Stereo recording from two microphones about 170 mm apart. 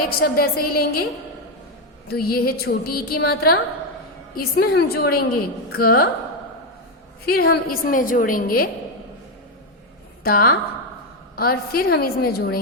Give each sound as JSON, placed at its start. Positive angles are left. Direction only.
{"t": 0.2, "sound": "a woman's voice", "side_deg": 65}
{"t": 2.0, "sound": "a woman's voice", "side_deg": 65}
{"t": 7.3, "sound": "a woman's voice", "side_deg": 65}
{"t": 10.2, "sound": "a woman's voice", "side_deg": 60}